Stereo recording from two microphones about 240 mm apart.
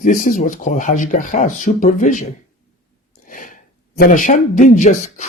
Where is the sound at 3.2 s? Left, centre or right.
Left.